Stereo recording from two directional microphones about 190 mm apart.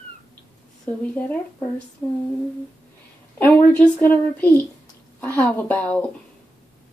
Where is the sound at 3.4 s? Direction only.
10° left (ahead or behind).